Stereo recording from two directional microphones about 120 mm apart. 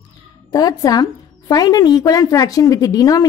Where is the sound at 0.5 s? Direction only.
30° left (ahead or behind).